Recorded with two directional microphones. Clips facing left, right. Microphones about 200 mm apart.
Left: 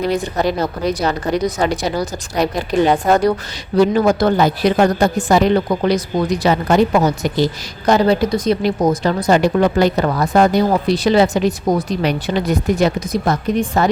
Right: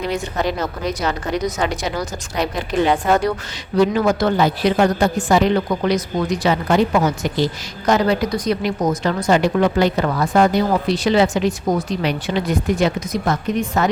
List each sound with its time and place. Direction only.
0.1 s speech: 35° left (ahead or behind)